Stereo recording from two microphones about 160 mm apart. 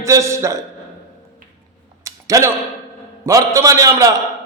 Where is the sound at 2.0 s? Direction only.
20° right (ahead or behind).